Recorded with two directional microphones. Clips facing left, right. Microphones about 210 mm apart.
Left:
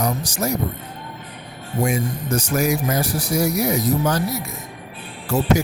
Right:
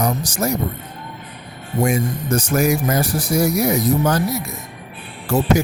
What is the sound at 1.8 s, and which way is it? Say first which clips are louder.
Speech: right 3 dB; 50° right (ahead or behind).